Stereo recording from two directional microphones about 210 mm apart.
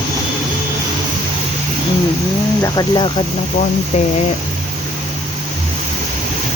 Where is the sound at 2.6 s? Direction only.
20° left (ahead or behind).